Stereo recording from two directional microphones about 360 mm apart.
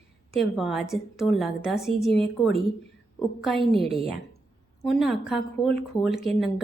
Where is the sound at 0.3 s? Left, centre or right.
Centre.